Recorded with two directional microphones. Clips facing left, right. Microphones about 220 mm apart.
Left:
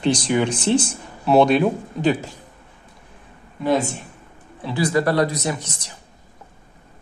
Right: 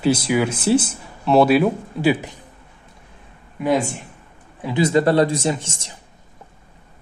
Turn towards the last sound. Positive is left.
turn(degrees=-25)  # may be behind; listen again after turning